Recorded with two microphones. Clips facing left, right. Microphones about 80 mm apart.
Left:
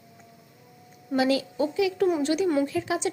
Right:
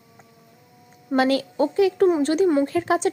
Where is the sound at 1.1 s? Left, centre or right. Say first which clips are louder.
Right 4 dB; right.